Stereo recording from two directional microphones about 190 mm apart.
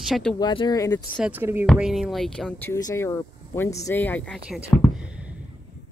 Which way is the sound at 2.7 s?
15° left (ahead or behind).